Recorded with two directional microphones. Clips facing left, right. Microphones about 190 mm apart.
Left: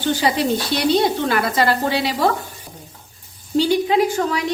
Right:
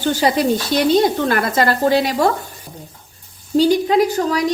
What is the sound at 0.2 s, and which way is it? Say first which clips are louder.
A woman's voice: right 3 dB; 45° right (ahead or behind).